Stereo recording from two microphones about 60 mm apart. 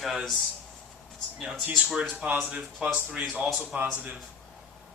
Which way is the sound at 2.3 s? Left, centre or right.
Right.